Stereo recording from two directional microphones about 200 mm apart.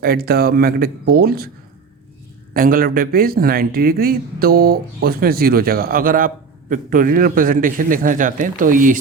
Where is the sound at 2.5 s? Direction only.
45° right (ahead or behind).